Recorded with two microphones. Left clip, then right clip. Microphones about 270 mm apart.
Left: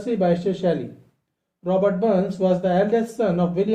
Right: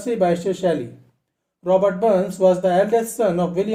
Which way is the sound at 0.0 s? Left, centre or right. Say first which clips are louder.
Right 2 dB; right.